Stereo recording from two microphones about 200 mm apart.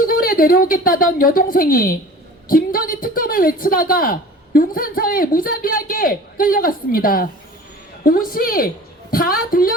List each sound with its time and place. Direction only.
0.0 s a woman's voice: 45° left (ahead or behind)